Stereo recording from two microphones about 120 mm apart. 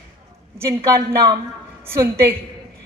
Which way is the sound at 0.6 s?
25° right (ahead or behind).